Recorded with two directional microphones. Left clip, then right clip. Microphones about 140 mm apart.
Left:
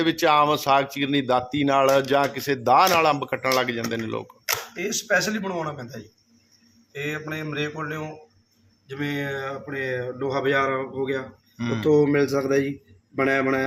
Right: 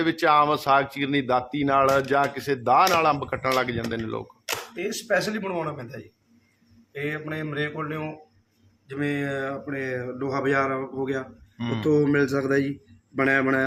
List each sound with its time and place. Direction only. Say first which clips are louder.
0.0 s speech: left 1 dB; 15° left (ahead or behind)
4.5 s speech: left 2 dB; 10° right (ahead or behind)
8.9 s speech: right 1 dB; 25° right (ahead or behind)
11.5 s speech: left 2 dB; 5° left (ahead or behind)
11.9 s speech: left 2 dB; 30° right (ahead or behind)